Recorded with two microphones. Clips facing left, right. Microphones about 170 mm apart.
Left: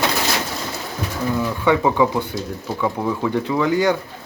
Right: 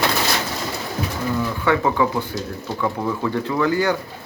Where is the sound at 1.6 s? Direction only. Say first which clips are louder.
Left 3 dB; 15° left (ahead or behind).